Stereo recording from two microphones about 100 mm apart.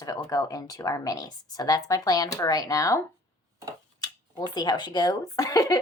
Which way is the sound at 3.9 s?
45° left (ahead or behind).